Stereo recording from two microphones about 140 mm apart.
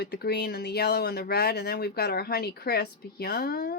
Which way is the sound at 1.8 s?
90° left.